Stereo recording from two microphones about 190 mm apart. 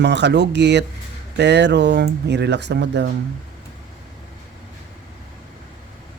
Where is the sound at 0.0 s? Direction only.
65° right (ahead or behind).